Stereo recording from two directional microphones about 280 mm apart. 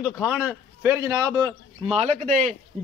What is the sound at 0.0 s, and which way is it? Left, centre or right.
A man's voice, centre.